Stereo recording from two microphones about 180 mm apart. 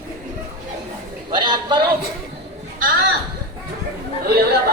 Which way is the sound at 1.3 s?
25° right (ahead or behind).